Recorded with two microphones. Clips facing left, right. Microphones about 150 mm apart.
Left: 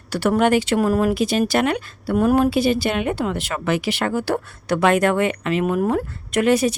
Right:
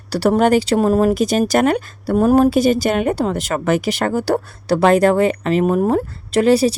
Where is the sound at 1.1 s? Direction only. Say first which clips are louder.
Right 3 dB; 40° right (ahead or behind).